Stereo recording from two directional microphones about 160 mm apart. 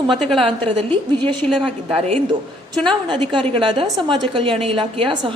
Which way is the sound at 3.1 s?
30° right (ahead or behind).